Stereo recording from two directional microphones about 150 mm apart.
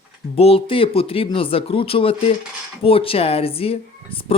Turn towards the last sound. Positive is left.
turn(degrees=40)  # may be behind; listen again after turning